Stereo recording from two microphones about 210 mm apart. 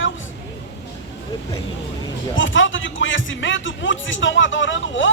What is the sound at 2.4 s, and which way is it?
Speech, 65° left (ahead or behind).